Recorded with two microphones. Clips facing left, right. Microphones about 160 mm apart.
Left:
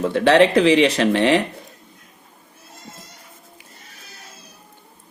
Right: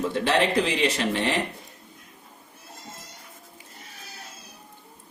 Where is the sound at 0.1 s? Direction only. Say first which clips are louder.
Left 11 dB; 75° left (ahead or behind).